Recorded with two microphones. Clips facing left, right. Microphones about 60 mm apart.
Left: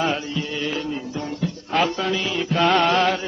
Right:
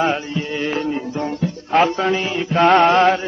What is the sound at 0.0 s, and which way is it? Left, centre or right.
Music, right.